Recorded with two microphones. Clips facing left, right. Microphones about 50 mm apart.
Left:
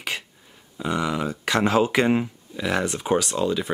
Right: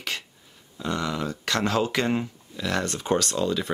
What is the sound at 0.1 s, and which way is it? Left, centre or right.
Grunt, centre.